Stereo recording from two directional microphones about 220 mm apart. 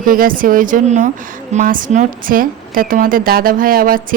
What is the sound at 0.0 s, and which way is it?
A woman's voice, 40° right (ahead or behind).